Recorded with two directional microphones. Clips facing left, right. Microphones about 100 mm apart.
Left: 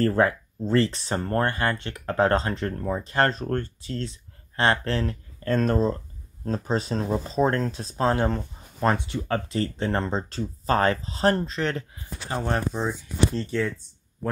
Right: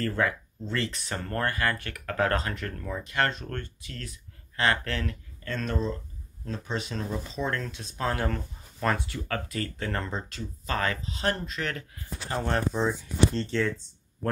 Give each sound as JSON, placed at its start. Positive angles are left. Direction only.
{"t": 0.0, "sound": "speech", "side_deg": 35}
{"t": 12.4, "sound": "speech", "side_deg": 15}